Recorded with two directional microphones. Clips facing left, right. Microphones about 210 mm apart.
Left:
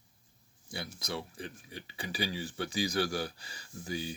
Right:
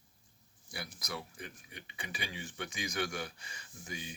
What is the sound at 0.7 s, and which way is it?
Speech, 25° left (ahead or behind).